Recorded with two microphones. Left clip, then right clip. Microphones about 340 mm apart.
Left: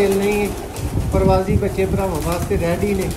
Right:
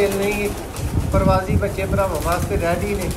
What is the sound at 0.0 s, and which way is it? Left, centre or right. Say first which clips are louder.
Speech: left 2 dB; centre.